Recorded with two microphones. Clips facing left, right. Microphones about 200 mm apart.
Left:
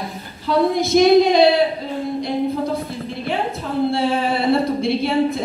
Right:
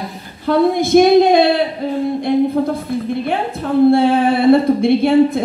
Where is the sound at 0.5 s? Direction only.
55° right (ahead or behind).